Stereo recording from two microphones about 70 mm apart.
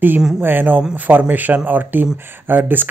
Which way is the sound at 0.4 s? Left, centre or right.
Right.